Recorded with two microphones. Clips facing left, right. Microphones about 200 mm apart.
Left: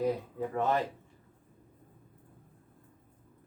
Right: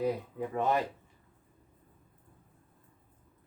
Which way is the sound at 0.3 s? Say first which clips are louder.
Even; 15° right (ahead or behind).